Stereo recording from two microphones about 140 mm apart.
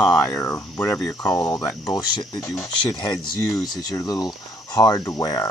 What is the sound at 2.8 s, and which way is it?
Speech, 30° left (ahead or behind).